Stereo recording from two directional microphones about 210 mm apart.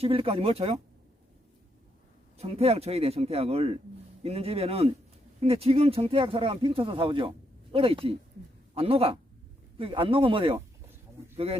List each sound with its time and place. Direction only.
0.0 s speech: 25° right (ahead or behind)
2.4 s a man's voice: 30° right (ahead or behind)